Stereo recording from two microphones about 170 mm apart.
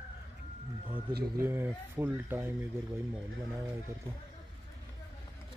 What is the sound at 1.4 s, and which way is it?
Speech, 15° right (ahead or behind).